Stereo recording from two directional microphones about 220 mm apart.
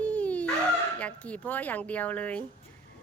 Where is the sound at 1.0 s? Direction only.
5° left (ahead or behind).